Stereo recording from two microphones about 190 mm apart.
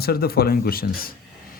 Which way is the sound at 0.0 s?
55° left (ahead or behind).